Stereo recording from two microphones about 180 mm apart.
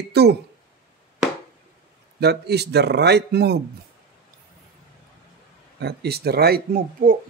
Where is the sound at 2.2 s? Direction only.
65° right (ahead or behind).